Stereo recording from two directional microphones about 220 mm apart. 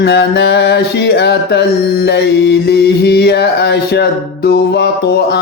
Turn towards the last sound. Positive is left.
turn(degrees=50)  # may be behind; listen again after turning